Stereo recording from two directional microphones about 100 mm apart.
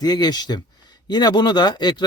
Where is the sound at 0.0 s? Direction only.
40° left (ahead or behind).